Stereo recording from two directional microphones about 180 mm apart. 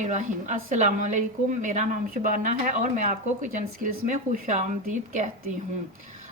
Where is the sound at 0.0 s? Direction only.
45° right (ahead or behind).